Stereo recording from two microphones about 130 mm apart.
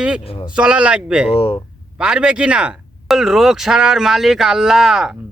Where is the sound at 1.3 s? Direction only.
45° left (ahead or behind).